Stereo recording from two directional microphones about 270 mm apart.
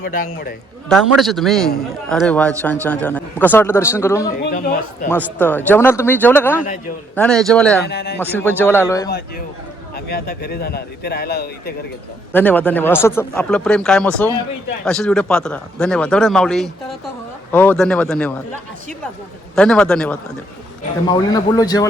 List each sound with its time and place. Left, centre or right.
0.0 s a man's voice: left
0.9 s speech: centre
4.3 s speech: left
5.0 s speech: centre
7.9 s a man's voice: left
8.2 s speech: centre
9.0 s a man's voice: left
12.3 s speech: centre
19.5 s speech: centre
21.1 s speech: centre